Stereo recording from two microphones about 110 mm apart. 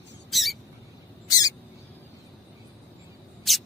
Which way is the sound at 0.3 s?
Centre (ahead or behind).